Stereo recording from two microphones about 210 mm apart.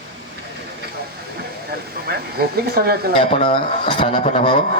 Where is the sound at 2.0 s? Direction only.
50° right (ahead or behind).